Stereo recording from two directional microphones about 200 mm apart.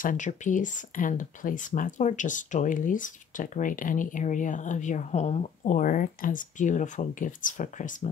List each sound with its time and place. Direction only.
0.0 s speech: 40° left (ahead or behind)